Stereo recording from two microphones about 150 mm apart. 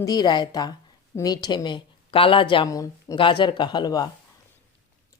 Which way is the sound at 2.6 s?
20° left (ahead or behind).